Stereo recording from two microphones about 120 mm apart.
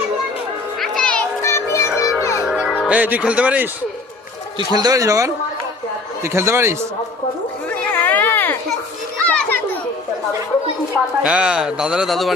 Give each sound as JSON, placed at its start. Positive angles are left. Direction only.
{"t": 0.8, "sound": "music", "side_deg": 5}
{"t": 1.4, "sound": "music", "side_deg": 25}
{"t": 2.8, "sound": "speech", "side_deg": -10}
{"t": 4.5, "sound": "a man's voice", "side_deg": -35}
{"t": 7.9, "sound": "a sound", "side_deg": 15}
{"t": 9.2, "sound": "children playing", "side_deg": 10}
{"t": 11.2, "sound": "speech", "side_deg": -10}